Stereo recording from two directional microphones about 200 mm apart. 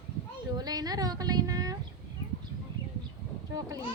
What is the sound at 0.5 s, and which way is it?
Speech, 20° right (ahead or behind).